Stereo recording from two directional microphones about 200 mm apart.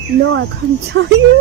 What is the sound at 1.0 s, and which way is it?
Speech, 55° right (ahead or behind).